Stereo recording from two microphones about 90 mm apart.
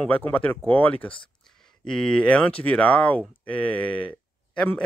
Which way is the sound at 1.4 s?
5° left (ahead or behind).